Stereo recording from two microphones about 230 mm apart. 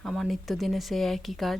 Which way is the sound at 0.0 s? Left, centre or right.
Centre.